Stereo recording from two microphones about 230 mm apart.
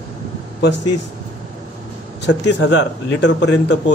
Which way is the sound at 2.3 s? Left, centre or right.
Left.